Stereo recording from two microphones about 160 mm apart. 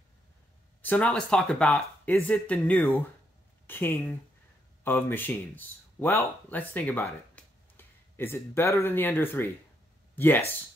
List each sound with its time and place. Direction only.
0.8 s speech: 10° left (ahead or behind)